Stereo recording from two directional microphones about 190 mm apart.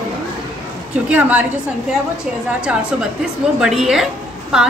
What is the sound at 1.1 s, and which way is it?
Speech, 10° right (ahead or behind).